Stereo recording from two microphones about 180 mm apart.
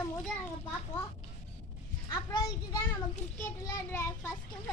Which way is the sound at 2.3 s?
20° left (ahead or behind).